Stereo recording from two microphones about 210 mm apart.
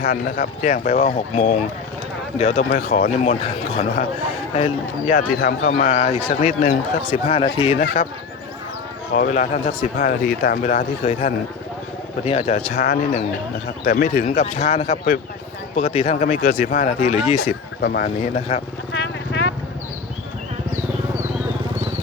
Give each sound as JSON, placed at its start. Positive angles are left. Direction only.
{"t": 0.0, "sound": "speech", "side_deg": 40}
{"t": 4.5, "sound": "speech", "side_deg": 35}
{"t": 5.4, "sound": "speech", "side_deg": 45}
{"t": 5.7, "sound": "speech", "side_deg": 35}
{"t": 7.1, "sound": "speech", "side_deg": 25}
{"t": 9.1, "sound": "speech", "side_deg": 40}
{"t": 12.7, "sound": "speech", "side_deg": 45}
{"t": 17.8, "sound": "speech", "side_deg": 50}
{"t": 18.3, "sound": "speech", "side_deg": 30}
{"t": 18.9, "sound": "vehicle", "side_deg": 55}